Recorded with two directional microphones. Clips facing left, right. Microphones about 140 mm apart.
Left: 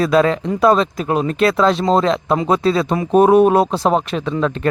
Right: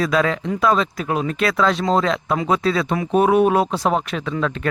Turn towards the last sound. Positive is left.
turn(degrees=30)  # may be behind; listen again after turning